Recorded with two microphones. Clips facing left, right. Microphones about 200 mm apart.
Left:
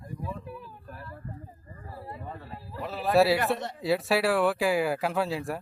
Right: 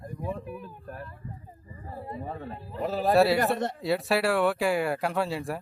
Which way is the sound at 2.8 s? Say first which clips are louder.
Right 5 dB; 40° right (ahead or behind).